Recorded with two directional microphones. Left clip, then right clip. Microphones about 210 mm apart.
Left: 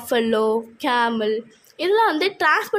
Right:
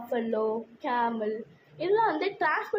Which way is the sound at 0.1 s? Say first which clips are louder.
Left 10 dB; 65° left (ahead or behind).